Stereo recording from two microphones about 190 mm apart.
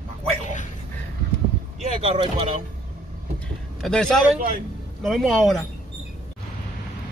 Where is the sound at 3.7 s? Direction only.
Centre (ahead or behind).